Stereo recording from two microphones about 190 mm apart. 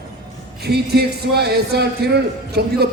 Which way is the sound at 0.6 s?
55° right (ahead or behind).